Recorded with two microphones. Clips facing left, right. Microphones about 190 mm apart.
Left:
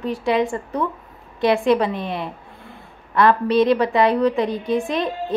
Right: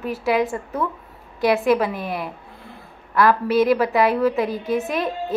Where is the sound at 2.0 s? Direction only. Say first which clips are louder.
Left 1 dB; 25° left (ahead or behind).